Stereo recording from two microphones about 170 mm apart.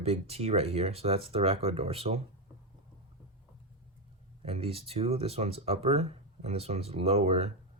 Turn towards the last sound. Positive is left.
turn(degrees=-35)  # may be behind; listen again after turning